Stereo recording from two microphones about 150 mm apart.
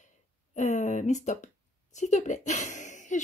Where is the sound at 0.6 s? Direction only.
55° left (ahead or behind).